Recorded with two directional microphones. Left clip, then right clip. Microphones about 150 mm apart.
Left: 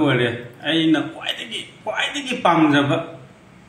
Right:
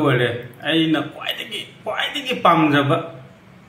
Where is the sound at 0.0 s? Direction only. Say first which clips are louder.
Right 1 dB; 15° right (ahead or behind).